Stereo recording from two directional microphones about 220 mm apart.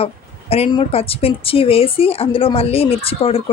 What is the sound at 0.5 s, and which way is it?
Speech, 25° left (ahead or behind).